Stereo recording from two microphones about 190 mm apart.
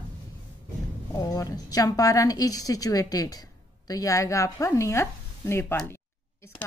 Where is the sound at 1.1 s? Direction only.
20° left (ahead or behind).